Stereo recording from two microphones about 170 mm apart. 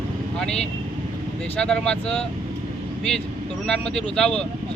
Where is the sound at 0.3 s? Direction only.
5° left (ahead or behind).